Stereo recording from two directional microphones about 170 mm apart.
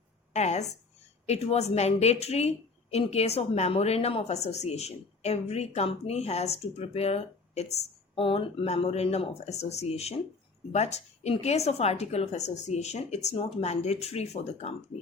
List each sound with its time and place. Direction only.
0.3 s speech: 40° left (ahead or behind)